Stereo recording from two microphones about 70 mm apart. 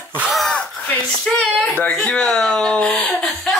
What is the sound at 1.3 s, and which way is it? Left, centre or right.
Speech, centre.